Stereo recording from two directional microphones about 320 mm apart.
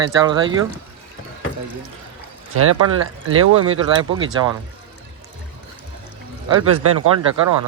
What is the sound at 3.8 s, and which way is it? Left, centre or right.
Speech, centre.